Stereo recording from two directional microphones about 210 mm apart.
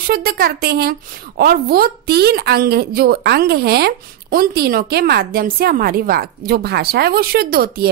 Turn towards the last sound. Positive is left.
turn(degrees=-45)  # may be behind; listen again after turning